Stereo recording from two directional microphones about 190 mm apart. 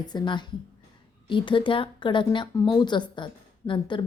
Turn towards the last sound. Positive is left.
turn(degrees=25)  # may be behind; listen again after turning